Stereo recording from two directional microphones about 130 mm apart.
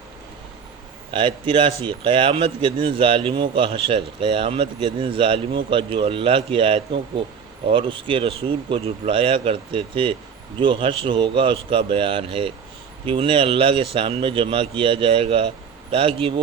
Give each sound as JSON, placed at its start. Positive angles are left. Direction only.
{"t": 1.1, "sound": "speech", "side_deg": -40}